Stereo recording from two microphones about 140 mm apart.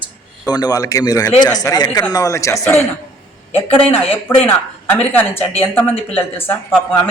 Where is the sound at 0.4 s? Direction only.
30° left (ahead or behind).